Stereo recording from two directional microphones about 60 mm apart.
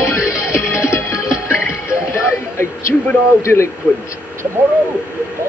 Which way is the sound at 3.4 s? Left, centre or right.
Left.